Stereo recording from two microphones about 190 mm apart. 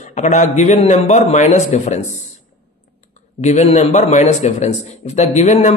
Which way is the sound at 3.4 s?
35° left (ahead or behind).